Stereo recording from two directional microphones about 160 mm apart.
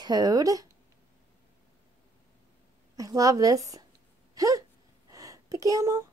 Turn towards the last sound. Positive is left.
turn(degrees=-20)  # may be behind; listen again after turning